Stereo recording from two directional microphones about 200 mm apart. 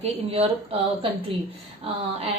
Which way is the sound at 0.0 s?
30° right (ahead or behind).